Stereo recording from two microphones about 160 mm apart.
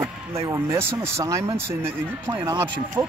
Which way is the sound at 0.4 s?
20° right (ahead or behind).